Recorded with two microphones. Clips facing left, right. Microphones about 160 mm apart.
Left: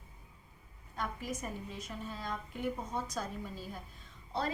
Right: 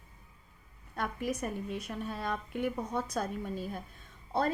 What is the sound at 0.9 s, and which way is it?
A woman's voice, 65° right (ahead or behind).